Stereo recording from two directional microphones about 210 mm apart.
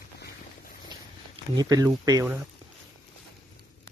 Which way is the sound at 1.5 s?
20° right (ahead or behind).